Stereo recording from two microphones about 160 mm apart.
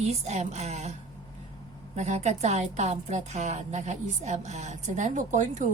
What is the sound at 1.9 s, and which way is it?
A woman's voice, 45° right (ahead or behind).